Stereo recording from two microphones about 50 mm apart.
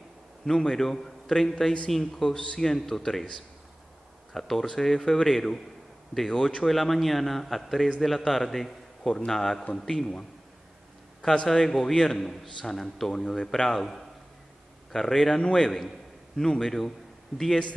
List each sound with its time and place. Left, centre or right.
0.5 s a man's voice: centre
2.3 s a man's voice: centre
2.7 s a man's voice: centre
4.3 s a man's voice: centre
11.4 s a man's voice: centre